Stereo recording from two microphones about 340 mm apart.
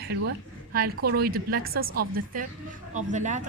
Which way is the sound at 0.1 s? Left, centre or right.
Right.